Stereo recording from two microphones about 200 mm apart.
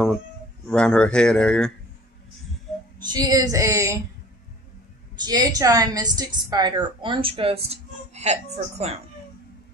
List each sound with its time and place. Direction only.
0.7 s speech: 5° left (ahead or behind)
3.0 s a woman's voice: 20° right (ahead or behind)
5.2 s a woman's voice: 20° right (ahead or behind)